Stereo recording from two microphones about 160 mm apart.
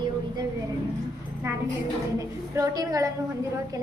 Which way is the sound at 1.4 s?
20° right (ahead or behind).